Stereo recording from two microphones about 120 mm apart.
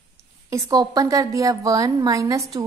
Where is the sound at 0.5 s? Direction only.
30° right (ahead or behind).